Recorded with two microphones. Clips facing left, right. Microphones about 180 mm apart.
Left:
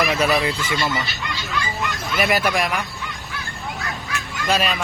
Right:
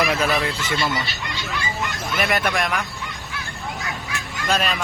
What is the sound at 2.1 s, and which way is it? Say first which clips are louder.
Speech: left 2 dB; 5° left (ahead or behind).